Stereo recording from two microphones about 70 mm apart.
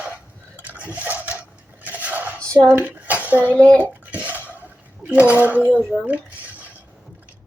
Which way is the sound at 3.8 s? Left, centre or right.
Right.